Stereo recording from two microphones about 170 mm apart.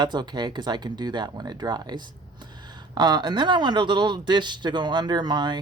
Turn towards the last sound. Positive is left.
turn(degrees=-25)  # may be behind; listen again after turning